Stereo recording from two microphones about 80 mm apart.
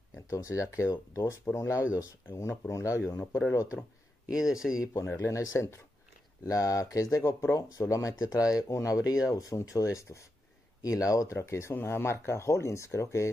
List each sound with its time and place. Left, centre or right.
0.3 s speech: left
4.3 s speech: centre
5.1 s speech: left
11.3 s speech: left